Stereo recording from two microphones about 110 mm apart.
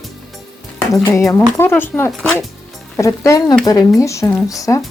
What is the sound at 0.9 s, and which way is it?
Speech, 30° left (ahead or behind).